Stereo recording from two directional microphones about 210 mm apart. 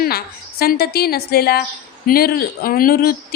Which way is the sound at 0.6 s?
45° left (ahead or behind).